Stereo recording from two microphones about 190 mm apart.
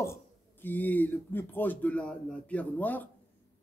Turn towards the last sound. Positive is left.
turn(degrees=10)  # may be behind; listen again after turning